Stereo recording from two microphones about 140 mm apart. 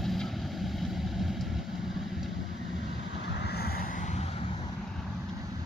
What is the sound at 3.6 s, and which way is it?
Vehicle, 90° left.